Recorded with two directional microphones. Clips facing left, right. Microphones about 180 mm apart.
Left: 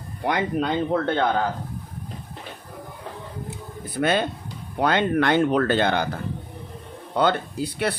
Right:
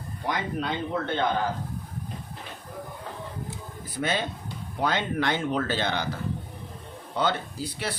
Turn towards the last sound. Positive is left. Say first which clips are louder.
# left 7 dB
turn(degrees=60)  # may be behind; listen again after turning